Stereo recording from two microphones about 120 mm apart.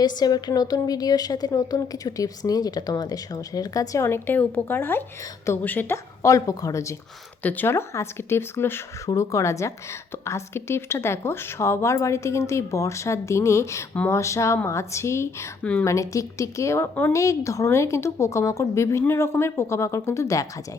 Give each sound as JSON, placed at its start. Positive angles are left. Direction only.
{"t": 0.0, "sound": "a woman's voice", "side_deg": 35}
{"t": 6.2, "sound": "a woman's voice", "side_deg": 30}
{"t": 7.4, "sound": "a woman's voice", "side_deg": 15}